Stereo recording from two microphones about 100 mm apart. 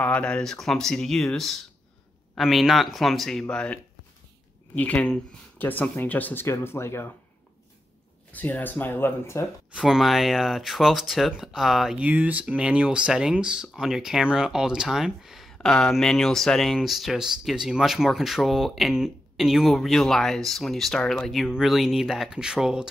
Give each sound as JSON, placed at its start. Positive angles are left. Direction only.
{"t": 0.0, "sound": "speech", "side_deg": 10}
{"t": 8.3, "sound": "speech", "side_deg": 15}
{"t": 9.7, "sound": "speech", "side_deg": -5}
{"t": 12.0, "sound": "speech", "side_deg": -15}
{"t": 15.5, "sound": "speech", "side_deg": 5}